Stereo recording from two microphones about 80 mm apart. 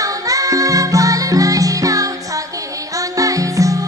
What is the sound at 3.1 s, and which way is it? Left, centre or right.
Music, right.